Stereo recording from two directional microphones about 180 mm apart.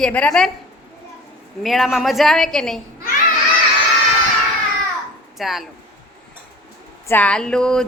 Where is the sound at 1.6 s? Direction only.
Centre (ahead or behind).